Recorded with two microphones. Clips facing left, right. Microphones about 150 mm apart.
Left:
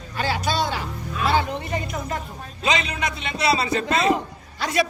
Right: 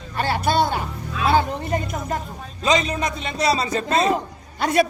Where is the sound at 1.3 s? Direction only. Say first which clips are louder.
Right 4 dB; 45° right (ahead or behind).